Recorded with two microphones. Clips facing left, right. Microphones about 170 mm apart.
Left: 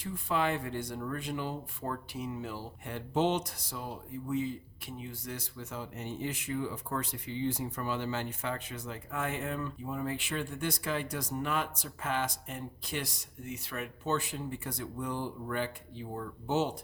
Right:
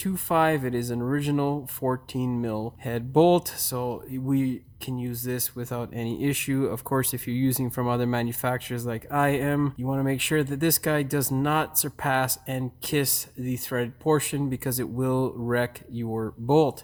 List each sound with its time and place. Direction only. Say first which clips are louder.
0.0 s speech: right 8 dB; 60° right (ahead or behind)